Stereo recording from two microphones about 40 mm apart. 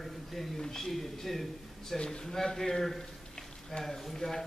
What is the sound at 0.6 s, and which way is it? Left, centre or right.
A man's voice, centre.